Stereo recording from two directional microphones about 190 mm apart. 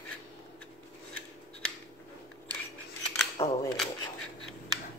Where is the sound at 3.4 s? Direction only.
30° left (ahead or behind).